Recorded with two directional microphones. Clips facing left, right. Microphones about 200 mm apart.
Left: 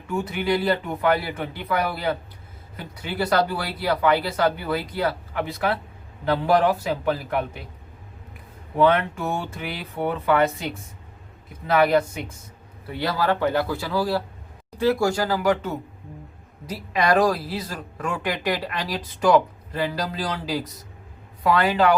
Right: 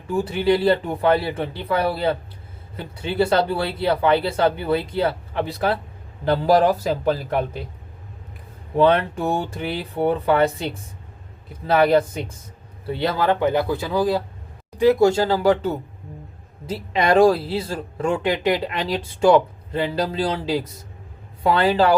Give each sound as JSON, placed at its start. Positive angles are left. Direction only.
{"t": 0.1, "sound": "speech", "side_deg": -30}
{"t": 8.7, "sound": "speech", "side_deg": -30}